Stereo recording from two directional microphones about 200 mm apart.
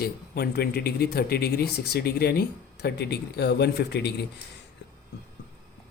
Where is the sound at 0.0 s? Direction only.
50° left (ahead or behind).